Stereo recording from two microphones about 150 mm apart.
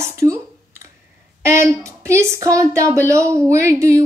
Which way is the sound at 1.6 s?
20° right (ahead or behind).